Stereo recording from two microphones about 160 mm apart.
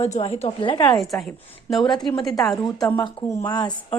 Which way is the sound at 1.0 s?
Centre (ahead or behind).